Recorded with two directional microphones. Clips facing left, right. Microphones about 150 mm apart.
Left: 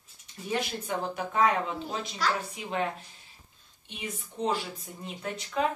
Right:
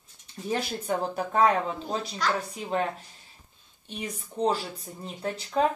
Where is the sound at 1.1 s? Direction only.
35° right (ahead or behind).